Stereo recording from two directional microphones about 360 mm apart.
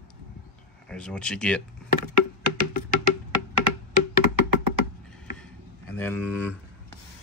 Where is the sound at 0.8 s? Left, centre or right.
Centre.